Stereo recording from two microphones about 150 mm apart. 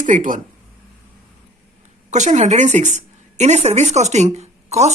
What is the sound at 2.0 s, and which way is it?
A woman's voice, 50° right (ahead or behind).